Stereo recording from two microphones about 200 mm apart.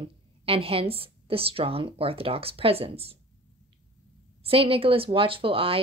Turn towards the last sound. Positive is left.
turn(degrees=-30)  # may be behind; listen again after turning